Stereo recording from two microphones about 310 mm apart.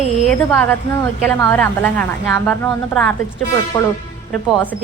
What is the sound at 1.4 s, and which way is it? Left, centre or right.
Speech, centre.